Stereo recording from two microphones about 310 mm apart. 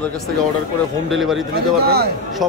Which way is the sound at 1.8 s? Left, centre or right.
Right.